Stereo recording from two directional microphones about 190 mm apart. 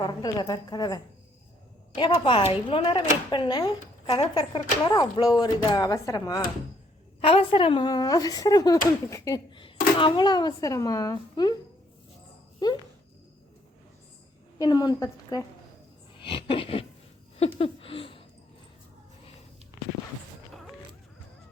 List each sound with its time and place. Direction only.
0.0 s speech: 20° left (ahead or behind)
7.2 s speech: 30° left (ahead or behind)
12.6 s speech: 20° left (ahead or behind)
14.6 s speech: 20° left (ahead or behind)
16.1 s a sound: 25° left (ahead or behind)